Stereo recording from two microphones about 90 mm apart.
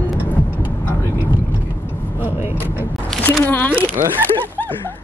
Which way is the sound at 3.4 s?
20° left (ahead or behind).